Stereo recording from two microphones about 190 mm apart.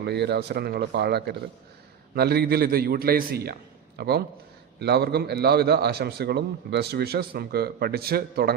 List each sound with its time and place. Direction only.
0.0 s a man's voice: 60° right (ahead or behind)